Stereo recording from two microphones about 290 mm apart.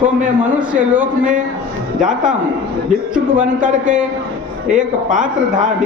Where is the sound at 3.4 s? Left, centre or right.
Centre.